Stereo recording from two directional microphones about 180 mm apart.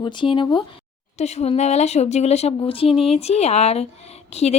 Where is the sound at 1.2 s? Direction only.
40° left (ahead or behind).